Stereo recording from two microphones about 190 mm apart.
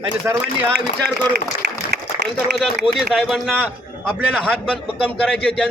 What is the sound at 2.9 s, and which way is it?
Speech, centre (ahead or behind).